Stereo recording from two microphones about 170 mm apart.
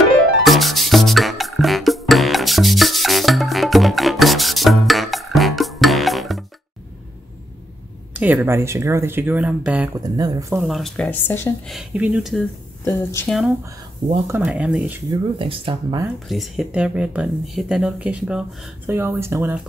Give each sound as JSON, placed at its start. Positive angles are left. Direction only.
{"t": 0.4, "sound": "music", "side_deg": 0}
{"t": 8.1, "sound": "speech", "side_deg": -10}
{"t": 9.9, "sound": "speech", "side_deg": -20}
{"t": 10.6, "sound": "speech", "side_deg": 0}
{"t": 11.7, "sound": "speech", "side_deg": -5}
{"t": 12.8, "sound": "speech", "side_deg": 15}
{"t": 13.3, "sound": "speech", "side_deg": 0}
{"t": 14.2, "sound": "speech", "side_deg": -10}
{"t": 15.0, "sound": "speech", "side_deg": -30}
{"t": 16.3, "sound": "speech", "side_deg": 0}